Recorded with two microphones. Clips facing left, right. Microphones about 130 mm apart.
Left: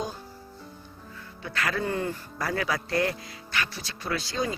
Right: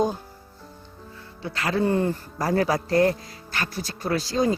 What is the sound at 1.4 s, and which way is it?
A man's voice, 30° right (ahead or behind).